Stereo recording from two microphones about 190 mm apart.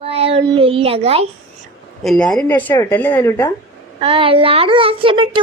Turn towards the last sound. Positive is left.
turn(degrees=-30)  # may be behind; listen again after turning